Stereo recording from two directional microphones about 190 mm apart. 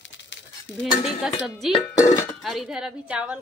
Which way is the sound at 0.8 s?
Centre (ahead or behind).